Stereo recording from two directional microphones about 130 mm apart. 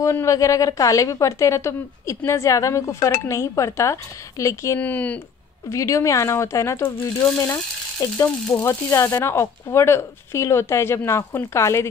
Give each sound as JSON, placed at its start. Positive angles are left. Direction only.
{"t": 0.0, "sound": "speech", "side_deg": 25}
{"t": 4.7, "sound": "speech", "side_deg": 10}
{"t": 5.7, "sound": "speech", "side_deg": 20}